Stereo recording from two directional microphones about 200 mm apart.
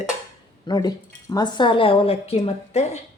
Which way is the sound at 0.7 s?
20° left (ahead or behind).